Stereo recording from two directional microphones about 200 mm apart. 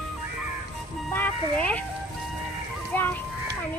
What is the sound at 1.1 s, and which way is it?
Speech, 10° left (ahead or behind).